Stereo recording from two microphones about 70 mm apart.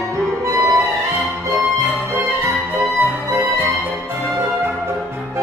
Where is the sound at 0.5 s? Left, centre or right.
Right.